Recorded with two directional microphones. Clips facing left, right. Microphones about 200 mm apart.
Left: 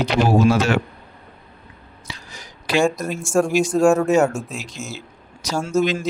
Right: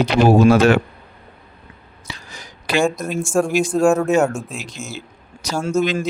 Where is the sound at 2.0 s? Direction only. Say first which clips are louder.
Right 2 dB; 55° right (ahead or behind).